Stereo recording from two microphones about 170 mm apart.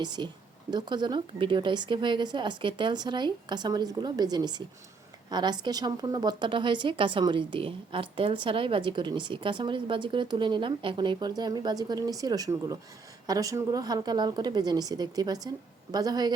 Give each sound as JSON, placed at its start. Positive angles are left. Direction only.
{"t": 0.0, "sound": "a woman's voice", "side_deg": -25}